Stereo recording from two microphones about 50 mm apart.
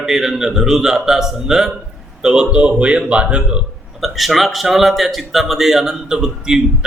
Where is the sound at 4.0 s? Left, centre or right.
Centre.